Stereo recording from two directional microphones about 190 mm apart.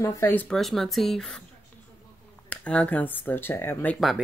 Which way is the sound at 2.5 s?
5° left (ahead or behind).